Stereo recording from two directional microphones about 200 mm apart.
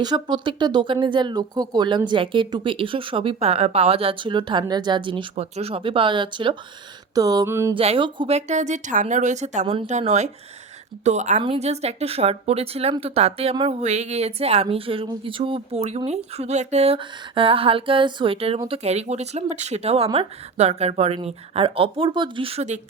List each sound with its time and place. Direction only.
0.0 s speech: 20° right (ahead or behind)
7.1 s a sound: 20° right (ahead or behind)
7.7 s speech: 25° right (ahead or behind)